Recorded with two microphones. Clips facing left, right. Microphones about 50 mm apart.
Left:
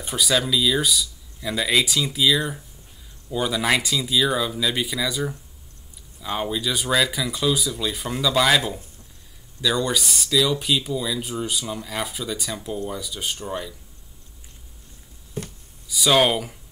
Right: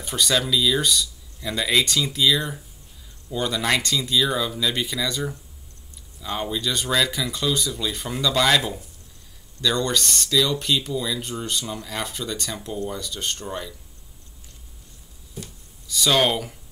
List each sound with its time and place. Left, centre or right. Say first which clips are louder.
0.0 s speech: left 1 dB; centre
15.4 s a sound: left 5 dB; left
15.9 s speech: left 2 dB; centre